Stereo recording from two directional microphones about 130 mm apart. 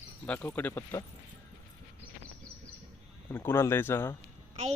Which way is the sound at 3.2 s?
15° left (ahead or behind).